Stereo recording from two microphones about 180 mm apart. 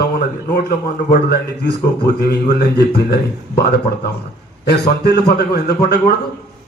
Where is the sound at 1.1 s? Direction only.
60° left (ahead or behind).